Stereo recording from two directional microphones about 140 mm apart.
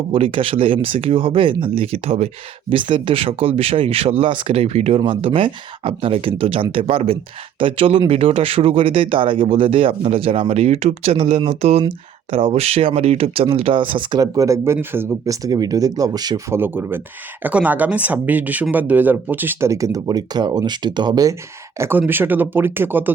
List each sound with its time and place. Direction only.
0.1 s speech: 40° right (ahead or behind)
16.6 s speech: 15° right (ahead or behind)
21.8 s speech: 15° right (ahead or behind)